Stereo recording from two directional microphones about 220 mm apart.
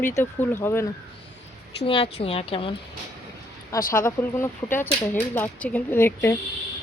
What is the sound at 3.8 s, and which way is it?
Speech, 40° left (ahead or behind).